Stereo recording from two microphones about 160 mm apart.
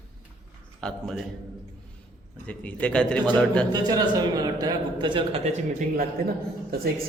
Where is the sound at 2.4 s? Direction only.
10° left (ahead or behind).